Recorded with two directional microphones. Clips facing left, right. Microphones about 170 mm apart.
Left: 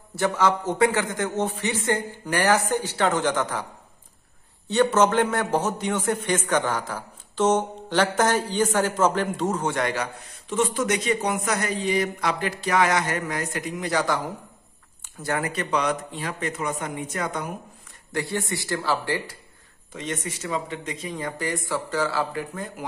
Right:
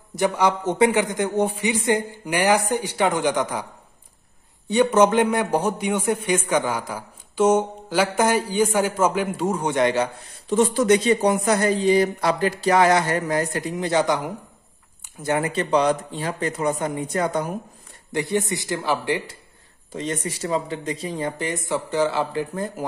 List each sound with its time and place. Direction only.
0.1 s a man's voice: 15° right (ahead or behind)
4.6 s a man's voice: 15° right (ahead or behind)
10.5 s a man's voice: 35° right (ahead or behind)
18.1 s speech: 20° right (ahead or behind)
19.9 s a man's voice: 35° right (ahead or behind)